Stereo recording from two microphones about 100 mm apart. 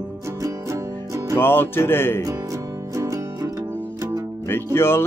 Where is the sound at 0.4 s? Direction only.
30° right (ahead or behind).